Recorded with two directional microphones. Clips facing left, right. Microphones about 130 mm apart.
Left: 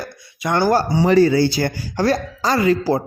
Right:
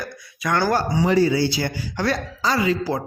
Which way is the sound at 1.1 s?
60° left (ahead or behind).